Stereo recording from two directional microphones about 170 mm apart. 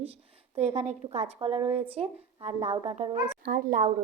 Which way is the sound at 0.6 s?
40° right (ahead or behind).